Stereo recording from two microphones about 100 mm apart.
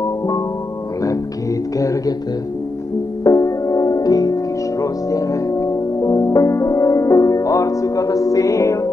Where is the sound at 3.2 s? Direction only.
35° left (ahead or behind).